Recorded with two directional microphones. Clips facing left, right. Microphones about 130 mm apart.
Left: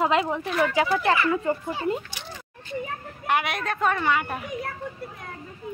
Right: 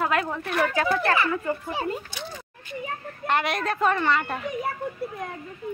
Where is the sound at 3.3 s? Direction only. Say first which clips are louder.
Even; 5° left (ahead or behind).